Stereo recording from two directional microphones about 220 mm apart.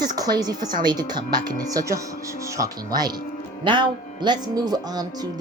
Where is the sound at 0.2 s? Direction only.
15° right (ahead or behind).